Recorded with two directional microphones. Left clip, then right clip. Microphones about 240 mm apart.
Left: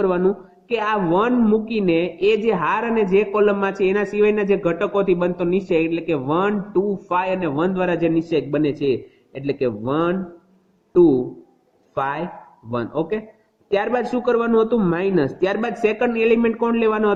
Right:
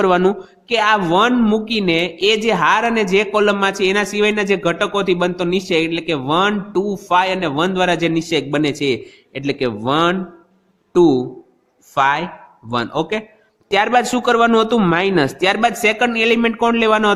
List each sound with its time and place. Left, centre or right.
0.0 s a man's voice: right